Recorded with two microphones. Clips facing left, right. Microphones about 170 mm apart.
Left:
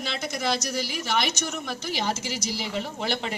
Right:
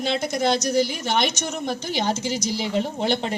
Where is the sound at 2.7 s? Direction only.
30° right (ahead or behind).